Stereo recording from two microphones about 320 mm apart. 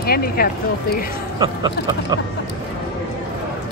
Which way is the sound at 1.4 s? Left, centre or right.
Centre.